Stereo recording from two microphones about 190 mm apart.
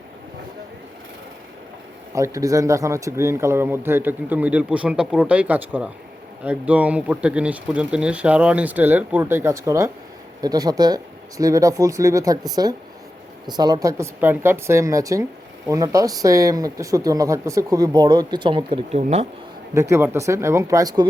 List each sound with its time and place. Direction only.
2.1 s speech: 15° right (ahead or behind)
13.5 s speech: 20° right (ahead or behind)
19.7 s speech: 15° right (ahead or behind)